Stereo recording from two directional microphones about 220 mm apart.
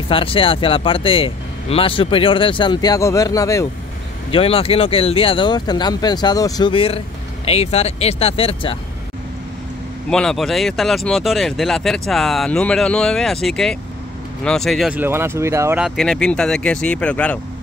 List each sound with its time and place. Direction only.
0.1 s speech: 25° left (ahead or behind)
10.0 s speech: 5° left (ahead or behind)